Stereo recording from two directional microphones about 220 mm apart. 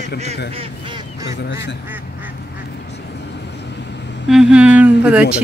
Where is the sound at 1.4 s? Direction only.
50° left (ahead or behind).